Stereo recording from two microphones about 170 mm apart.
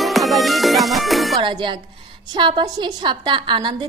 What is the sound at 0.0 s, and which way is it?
Music, centre (ahead or behind).